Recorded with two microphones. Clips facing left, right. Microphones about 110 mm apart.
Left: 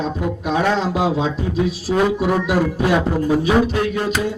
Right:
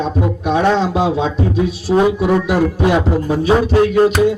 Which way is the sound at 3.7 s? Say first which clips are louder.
Right 9 dB; 35° right (ahead or behind).